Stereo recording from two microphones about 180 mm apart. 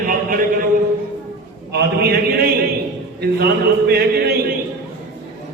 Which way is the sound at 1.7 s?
65° right (ahead or behind).